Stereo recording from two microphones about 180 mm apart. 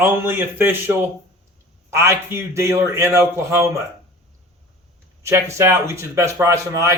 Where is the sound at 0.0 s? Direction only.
10° right (ahead or behind).